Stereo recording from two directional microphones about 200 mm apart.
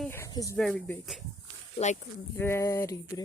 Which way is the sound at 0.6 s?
5° left (ahead or behind).